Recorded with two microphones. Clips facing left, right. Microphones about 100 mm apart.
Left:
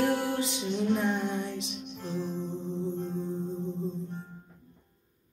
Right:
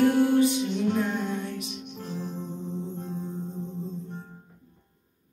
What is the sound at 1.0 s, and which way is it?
Music, 20° left (ahead or behind).